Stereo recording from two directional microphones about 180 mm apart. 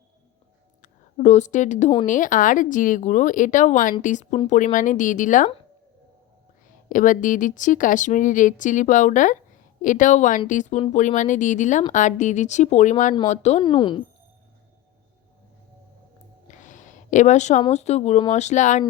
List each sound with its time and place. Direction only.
0.8 s a woman's voice: 40° left (ahead or behind)
6.8 s speech: 45° left (ahead or behind)
13.6 s speech: 25° left (ahead or behind)
16.5 s a sound: 45° left (ahead or behind)
17.7 s speech: 40° left (ahead or behind)